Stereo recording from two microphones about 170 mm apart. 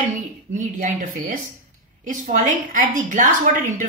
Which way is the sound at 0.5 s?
50° right (ahead or behind).